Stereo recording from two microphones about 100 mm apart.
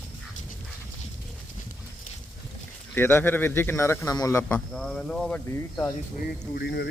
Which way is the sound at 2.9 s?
20° left (ahead or behind).